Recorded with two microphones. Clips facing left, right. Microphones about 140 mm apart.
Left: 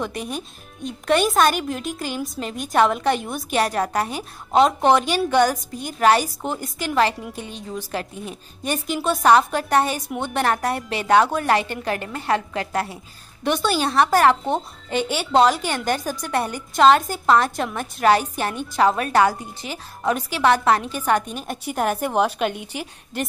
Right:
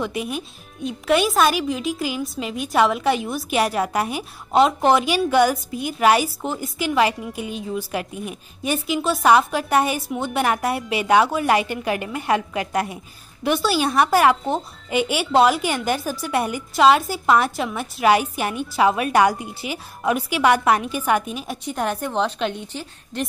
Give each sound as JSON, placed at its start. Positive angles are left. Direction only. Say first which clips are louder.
{"t": 0.8, "sound": "a woman's voice", "louder": "even", "side_deg": 0}
{"t": 8.8, "sound": "speech", "louder": "even", "side_deg": 0}
{"t": 13.5, "sound": "a woman's voice", "louder": "right 1 dB", "side_deg": -5}